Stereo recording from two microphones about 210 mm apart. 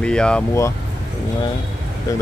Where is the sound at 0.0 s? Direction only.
5° left (ahead or behind).